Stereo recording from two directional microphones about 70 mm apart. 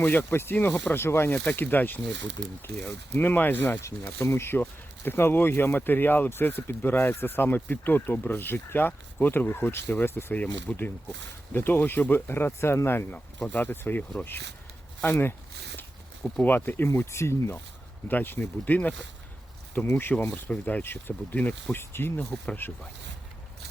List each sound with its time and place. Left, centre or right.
0.0 s speech: left
1.5 s speech: left
15.0 s a sound: left
16.4 s speech: left
18.1 s speech: left
21.8 s speech: left